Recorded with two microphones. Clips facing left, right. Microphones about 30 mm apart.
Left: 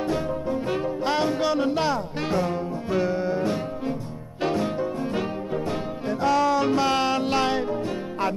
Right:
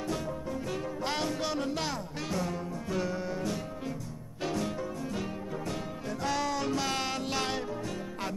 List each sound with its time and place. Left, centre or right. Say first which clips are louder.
0.0 s music: left 9 dB; left
6.3 s music: left 11 dB; centre
6.6 s music: left 10 dB; left